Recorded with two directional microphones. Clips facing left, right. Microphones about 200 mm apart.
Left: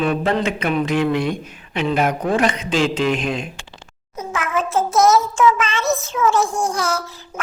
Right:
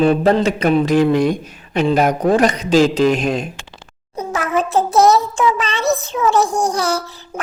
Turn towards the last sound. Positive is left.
turn(degrees=-35)  # may be behind; listen again after turning